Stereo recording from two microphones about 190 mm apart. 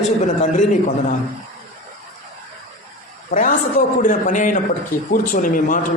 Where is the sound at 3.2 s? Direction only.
45° left (ahead or behind).